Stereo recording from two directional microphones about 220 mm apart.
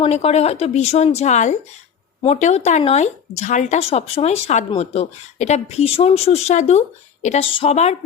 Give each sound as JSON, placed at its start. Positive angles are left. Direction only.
{"t": 0.0, "sound": "speech", "side_deg": 30}